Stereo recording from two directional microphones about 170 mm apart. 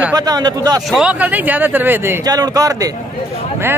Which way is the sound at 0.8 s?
5° right (ahead or behind).